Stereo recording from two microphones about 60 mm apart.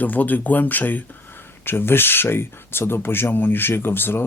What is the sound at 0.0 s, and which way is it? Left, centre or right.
Speech, left.